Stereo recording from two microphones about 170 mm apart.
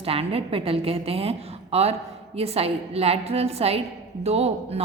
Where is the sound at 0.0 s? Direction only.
35° right (ahead or behind).